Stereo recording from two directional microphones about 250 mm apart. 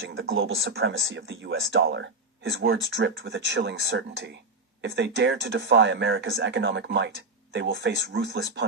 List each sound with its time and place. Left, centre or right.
0.3 s speech: right